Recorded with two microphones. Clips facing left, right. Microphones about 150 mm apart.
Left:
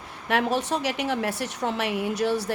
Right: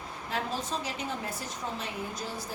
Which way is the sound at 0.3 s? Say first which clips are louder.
Left 10 dB; 75° left (ahead or behind).